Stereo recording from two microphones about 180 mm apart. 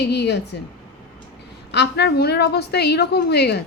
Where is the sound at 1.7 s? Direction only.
70° left (ahead or behind).